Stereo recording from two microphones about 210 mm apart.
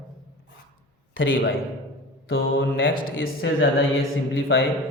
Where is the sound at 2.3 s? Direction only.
70° left (ahead or behind).